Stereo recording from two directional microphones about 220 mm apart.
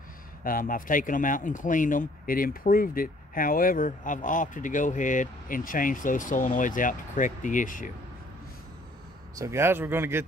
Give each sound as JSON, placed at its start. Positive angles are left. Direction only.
{"t": 0.4, "sound": "speech", "side_deg": 40}
{"t": 9.3, "sound": "speech", "side_deg": -15}